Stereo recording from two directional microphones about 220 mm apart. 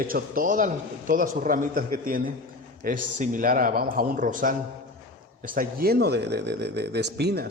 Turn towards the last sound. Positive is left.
turn(degrees=-50)  # may be behind; listen again after turning